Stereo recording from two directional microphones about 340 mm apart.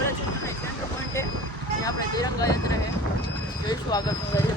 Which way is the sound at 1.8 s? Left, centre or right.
Centre.